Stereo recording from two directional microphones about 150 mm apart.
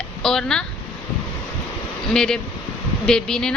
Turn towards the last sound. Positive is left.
turn(degrees=5)  # may be behind; listen again after turning